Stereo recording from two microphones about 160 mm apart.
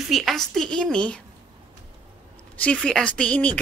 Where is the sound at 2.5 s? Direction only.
5° left (ahead or behind).